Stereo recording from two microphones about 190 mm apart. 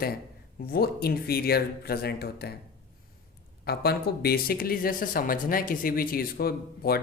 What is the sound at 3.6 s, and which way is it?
Speech, 55° left (ahead or behind).